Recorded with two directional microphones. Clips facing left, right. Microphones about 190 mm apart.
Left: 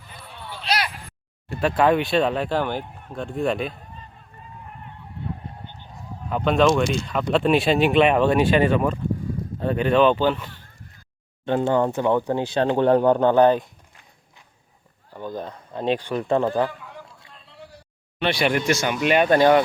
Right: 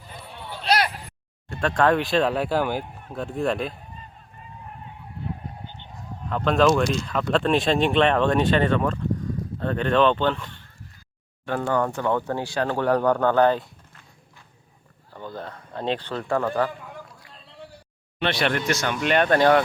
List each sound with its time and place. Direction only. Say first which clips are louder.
0.6 s a sound: right 3 dB; 50° right (ahead or behind)
1.5 s speech: left 2 dB; 5° left (ahead or behind)
5.9 s speech: left 2 dB; 5° left (ahead or behind)
11.4 s speech: left 4 dB; 25° left (ahead or behind)
15.1 s speech: left 4 dB; 15° left (ahead or behind)
18.2 s speech: left 2 dB; 5° left (ahead or behind)